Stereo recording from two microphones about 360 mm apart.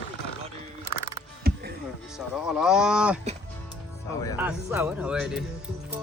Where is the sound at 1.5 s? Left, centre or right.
Right.